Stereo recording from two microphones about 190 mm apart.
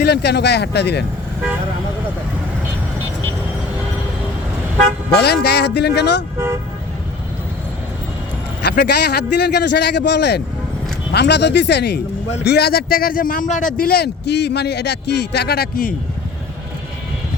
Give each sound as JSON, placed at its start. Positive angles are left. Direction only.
{"t": 0.0, "sound": "a man's voice", "side_deg": 60}
{"t": 5.1, "sound": "a man's voice", "side_deg": 60}
{"t": 8.6, "sound": "a man's voice", "side_deg": 60}